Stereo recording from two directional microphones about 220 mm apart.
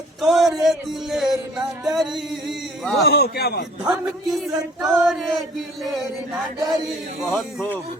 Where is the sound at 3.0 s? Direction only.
45° left (ahead or behind).